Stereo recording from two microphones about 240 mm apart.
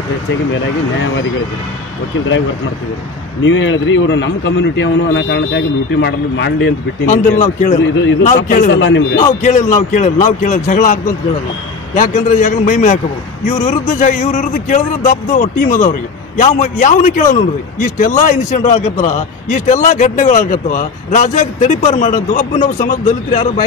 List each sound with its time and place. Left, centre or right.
3.4 s a man's voice: left
7.1 s a man's voice: left
7.8 s a man's voice: left
9.1 s a man's voice: left